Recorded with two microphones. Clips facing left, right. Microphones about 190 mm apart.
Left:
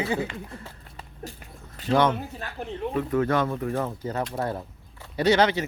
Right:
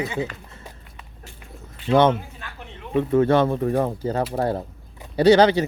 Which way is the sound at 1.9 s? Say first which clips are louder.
Right 5 dB; 25° right (ahead or behind).